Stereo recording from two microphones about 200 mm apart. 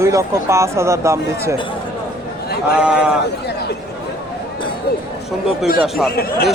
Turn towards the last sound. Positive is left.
turn(degrees=50)  # may be behind; listen again after turning